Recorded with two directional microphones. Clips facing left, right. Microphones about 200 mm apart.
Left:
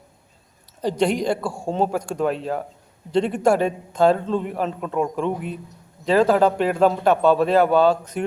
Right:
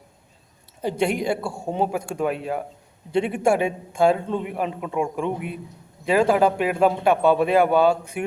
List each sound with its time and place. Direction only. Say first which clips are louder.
0.8 s a man's voice: left 2 dB; 10° right (ahead or behind)
1.4 s a man's voice: left 2 dB; 25° right (ahead or behind)
1.7 s a man's voice: left 2 dB; 10° right (ahead or behind)